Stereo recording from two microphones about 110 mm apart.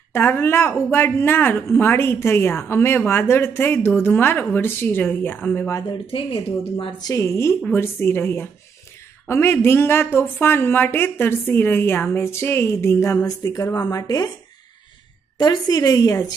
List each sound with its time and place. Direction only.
0.1 s speech: 20° left (ahead or behind)
5.7 s a woman's voice: 35° left (ahead or behind)
6.0 s a woman's voice: 55° left (ahead or behind)
7.1 s a woman's voice: 30° left (ahead or behind)
15.3 s a woman's voice: 35° left (ahead or behind)